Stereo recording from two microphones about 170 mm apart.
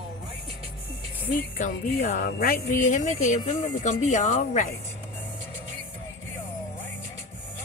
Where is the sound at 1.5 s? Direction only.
50° left (ahead or behind).